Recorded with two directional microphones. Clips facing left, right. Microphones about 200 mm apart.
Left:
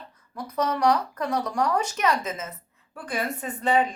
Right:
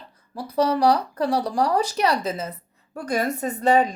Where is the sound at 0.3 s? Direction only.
30° right (ahead or behind).